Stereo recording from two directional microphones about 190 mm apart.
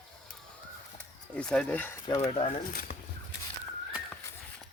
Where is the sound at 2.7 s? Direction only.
50° left (ahead or behind).